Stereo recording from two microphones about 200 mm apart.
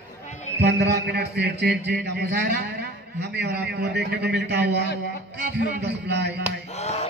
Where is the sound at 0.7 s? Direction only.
55° right (ahead or behind).